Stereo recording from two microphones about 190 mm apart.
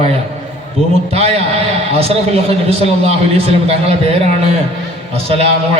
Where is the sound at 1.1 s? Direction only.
30° right (ahead or behind).